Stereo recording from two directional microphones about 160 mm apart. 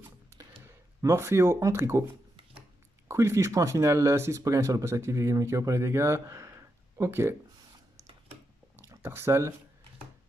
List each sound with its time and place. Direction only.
0.7 s speech: 15° right (ahead or behind)
3.1 s speech: 15° right (ahead or behind)
8.7 s a sound: 20° right (ahead or behind)